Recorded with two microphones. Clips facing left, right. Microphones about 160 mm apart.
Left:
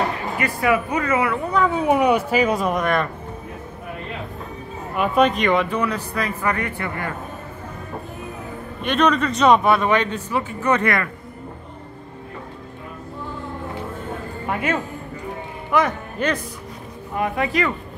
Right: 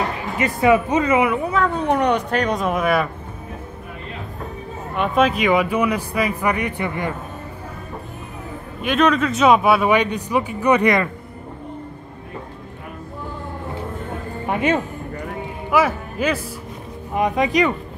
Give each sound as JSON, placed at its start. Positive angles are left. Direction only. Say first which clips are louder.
{"t": 0.4, "sound": "speech", "louder": "right 5 dB", "side_deg": -20}
{"t": 1.5, "sound": "speech", "louder": "left 1 dB", "side_deg": 5}
{"t": 4.9, "sound": "a man's voice", "louder": "even", "side_deg": 0}
{"t": 8.8, "sound": "a man's voice", "louder": "right 1 dB", "side_deg": 0}
{"t": 14.4, "sound": "music", "louder": "right 4 dB", "side_deg": -20}
{"t": 15.7, "sound": "a man's voice", "louder": "right 2 dB", "side_deg": -5}
{"t": 17.1, "sound": "a man's voice", "louder": "right 4 dB", "side_deg": -20}